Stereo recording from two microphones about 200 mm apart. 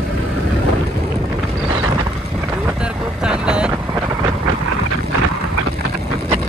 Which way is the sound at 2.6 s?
5° right (ahead or behind).